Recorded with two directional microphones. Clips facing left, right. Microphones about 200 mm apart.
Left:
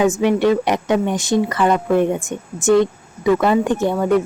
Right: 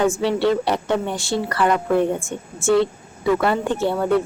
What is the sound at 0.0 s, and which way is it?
A woman's voice, 15° left (ahead or behind).